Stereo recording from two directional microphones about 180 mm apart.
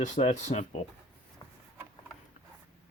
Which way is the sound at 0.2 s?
40° left (ahead or behind).